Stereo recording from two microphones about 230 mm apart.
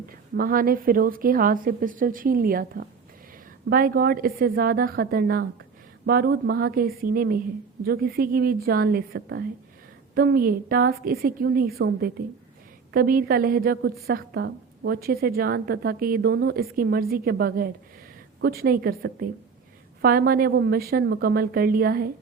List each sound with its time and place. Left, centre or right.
0.3 s a woman's voice: right